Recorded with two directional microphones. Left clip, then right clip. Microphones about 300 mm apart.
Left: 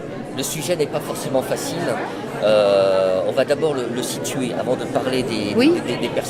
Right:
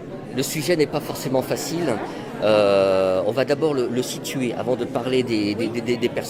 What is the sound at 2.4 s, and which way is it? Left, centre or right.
Speech, right.